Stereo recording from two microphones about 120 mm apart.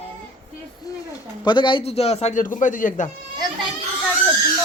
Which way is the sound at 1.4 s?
40° left (ahead or behind).